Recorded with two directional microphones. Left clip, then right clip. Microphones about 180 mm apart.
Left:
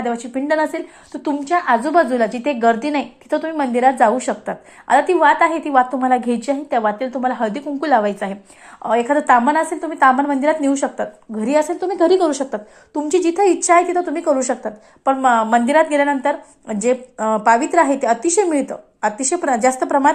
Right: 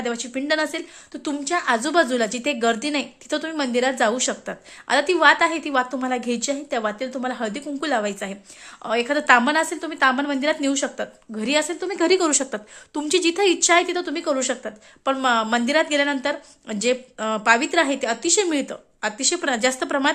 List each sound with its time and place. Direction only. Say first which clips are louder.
0.0 s a woman's voice: left 5 dB; 15° right (ahead or behind)